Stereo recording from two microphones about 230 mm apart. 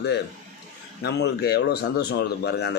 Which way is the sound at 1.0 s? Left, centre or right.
Left.